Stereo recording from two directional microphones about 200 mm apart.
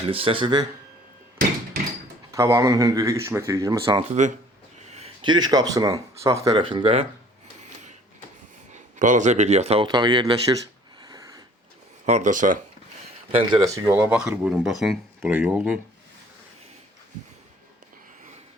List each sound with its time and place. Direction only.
0.0 s speech: 30° right (ahead or behind)
2.3 s speech: 15° right (ahead or behind)
8.7 s speech: 40° right (ahead or behind); by 10.3 s 20° right (ahead or behind)
11.0 s a sound: 20° right (ahead or behind)
12.0 s speech: 35° right (ahead or behind)
13.3 s speech: 20° right (ahead or behind)